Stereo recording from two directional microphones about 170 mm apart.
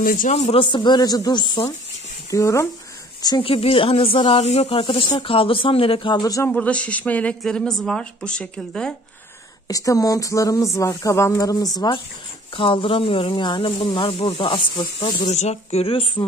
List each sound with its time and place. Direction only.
0.0 s speech: 55° left (ahead or behind)
0.3 s a woman's voice: 35° left (ahead or behind); by 6.5 s 20° left (ahead or behind)
6.5 s a woman's voice: 5° left (ahead or behind)
9.7 s speech: 20° left (ahead or behind)
15.3 s speech: 40° left (ahead or behind)